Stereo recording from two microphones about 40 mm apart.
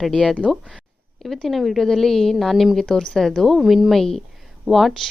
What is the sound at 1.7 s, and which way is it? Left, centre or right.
Speech, centre.